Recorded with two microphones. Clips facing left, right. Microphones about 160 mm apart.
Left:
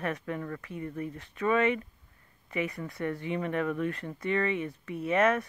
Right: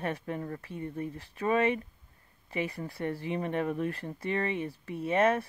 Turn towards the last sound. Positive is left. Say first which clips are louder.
# even
turn(degrees=-30)  # may be behind; listen again after turning